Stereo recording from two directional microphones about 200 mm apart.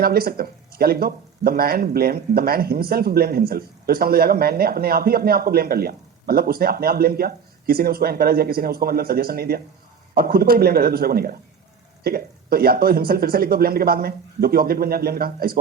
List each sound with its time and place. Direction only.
0.0 s speech: 50° right (ahead or behind)